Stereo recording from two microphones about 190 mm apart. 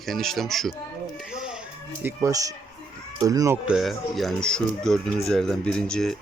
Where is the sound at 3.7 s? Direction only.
Centre (ahead or behind).